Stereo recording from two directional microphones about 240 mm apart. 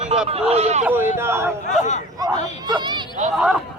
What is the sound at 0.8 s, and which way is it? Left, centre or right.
Speech, centre.